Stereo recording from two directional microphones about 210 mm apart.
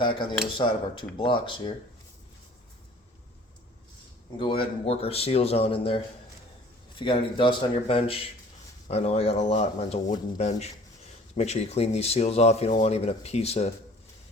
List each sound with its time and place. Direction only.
0.0 s speech: 25° left (ahead or behind)
4.4 s speech: 25° left (ahead or behind)
7.0 s speech: 25° left (ahead or behind)